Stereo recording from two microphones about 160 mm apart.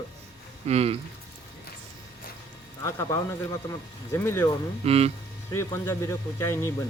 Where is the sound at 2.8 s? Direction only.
15° left (ahead or behind).